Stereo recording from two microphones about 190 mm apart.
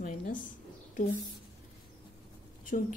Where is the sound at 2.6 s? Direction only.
40° left (ahead or behind).